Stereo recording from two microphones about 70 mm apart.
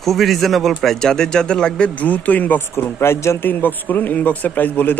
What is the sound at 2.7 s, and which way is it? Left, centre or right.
Speech, left.